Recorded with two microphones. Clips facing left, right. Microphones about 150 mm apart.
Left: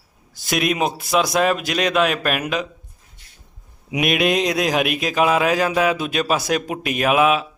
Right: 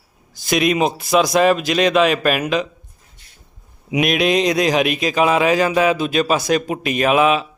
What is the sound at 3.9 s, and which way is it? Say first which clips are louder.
Speech: right 2 dB; centre (ahead or behind).